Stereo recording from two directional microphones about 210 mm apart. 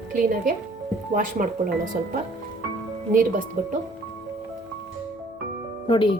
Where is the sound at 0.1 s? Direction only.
40° right (ahead or behind).